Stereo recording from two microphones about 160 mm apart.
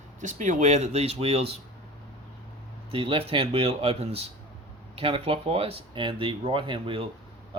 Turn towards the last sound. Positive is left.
turn(degrees=-30)  # may be behind; listen again after turning